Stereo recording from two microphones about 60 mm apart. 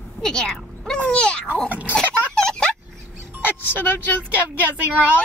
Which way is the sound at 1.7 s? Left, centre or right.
Right.